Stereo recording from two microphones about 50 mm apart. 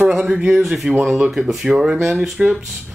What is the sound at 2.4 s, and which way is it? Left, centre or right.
Speech, right.